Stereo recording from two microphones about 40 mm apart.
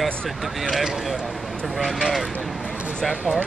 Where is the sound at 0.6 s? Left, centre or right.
Centre.